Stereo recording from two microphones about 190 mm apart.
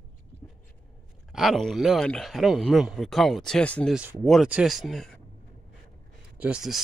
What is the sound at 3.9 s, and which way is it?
Speech, 5° right (ahead or behind).